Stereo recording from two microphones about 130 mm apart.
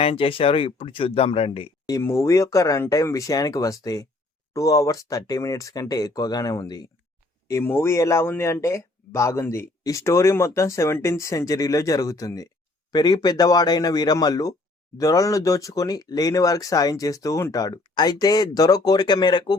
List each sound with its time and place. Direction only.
0.0 s speech: 45° left (ahead or behind)
1.9 s speech: 20° left (ahead or behind)